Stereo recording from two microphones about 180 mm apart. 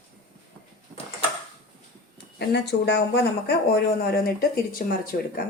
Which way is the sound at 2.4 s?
70° left (ahead or behind).